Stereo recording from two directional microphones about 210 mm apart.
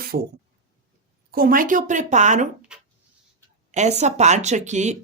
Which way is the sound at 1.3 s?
45° right (ahead or behind).